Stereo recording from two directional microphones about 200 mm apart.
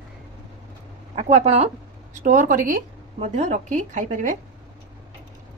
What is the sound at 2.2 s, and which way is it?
A woman's voice, 40° right (ahead or behind).